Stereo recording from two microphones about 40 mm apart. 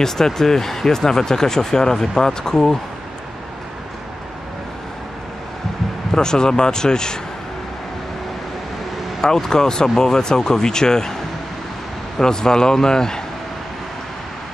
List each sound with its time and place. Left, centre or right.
0.0 s speech: centre
6.1 s speech: centre
9.2 s speech: centre
12.2 s speech: centre